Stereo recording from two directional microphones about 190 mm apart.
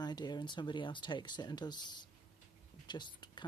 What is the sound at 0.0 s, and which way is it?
Speech, 20° left (ahead or behind).